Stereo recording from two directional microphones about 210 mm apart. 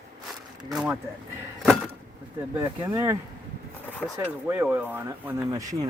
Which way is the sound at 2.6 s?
15° right (ahead or behind).